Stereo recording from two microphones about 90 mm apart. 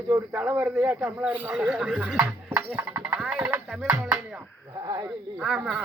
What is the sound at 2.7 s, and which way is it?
Speech, 25° right (ahead or behind).